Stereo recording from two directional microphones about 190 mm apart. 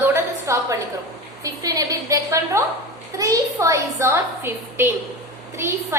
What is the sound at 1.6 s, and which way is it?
A woman's voice, 20° right (ahead or behind).